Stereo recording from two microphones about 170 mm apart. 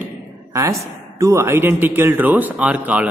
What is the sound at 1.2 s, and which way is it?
Speech, 15° right (ahead or behind).